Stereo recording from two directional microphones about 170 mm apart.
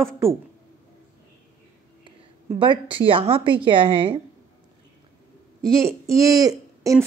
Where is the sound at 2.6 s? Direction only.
30° right (ahead or behind).